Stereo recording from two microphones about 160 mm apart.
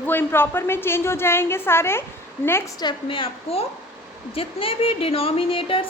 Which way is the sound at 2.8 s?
30° left (ahead or behind).